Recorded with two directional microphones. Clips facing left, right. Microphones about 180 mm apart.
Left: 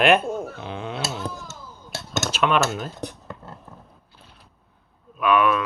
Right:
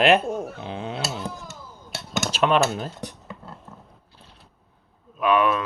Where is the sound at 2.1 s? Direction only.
35° right (ahead or behind).